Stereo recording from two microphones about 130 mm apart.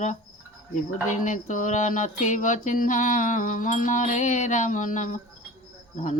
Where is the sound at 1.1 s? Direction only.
70° left (ahead or behind).